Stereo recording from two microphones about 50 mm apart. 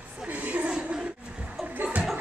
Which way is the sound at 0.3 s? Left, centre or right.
Right.